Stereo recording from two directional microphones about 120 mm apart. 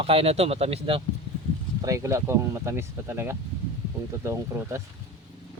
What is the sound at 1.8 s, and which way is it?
Speech, 25° right (ahead or behind).